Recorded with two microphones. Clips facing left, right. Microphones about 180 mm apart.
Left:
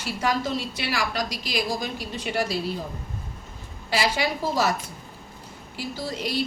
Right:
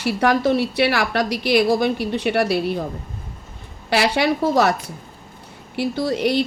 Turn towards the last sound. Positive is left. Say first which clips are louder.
# right 9 dB
turn(degrees=-65)  # may be behind; listen again after turning